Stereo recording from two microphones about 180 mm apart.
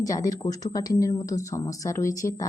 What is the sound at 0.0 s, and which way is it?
Speech, 20° left (ahead or behind).